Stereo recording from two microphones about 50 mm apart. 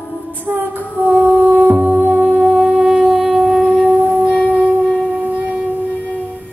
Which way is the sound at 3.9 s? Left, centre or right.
Right.